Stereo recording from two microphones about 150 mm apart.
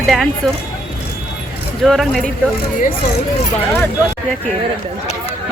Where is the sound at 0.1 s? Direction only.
Centre (ahead or behind).